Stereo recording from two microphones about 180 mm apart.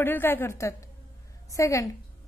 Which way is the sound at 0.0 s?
10° left (ahead or behind).